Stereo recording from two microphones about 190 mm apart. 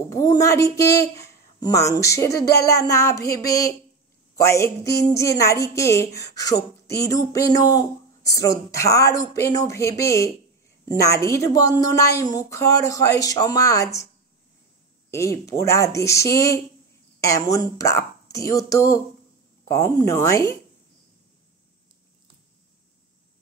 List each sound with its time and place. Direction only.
0.1 s a woman's voice: 15° left (ahead or behind)
15.0 s a woman's voice: 15° left (ahead or behind)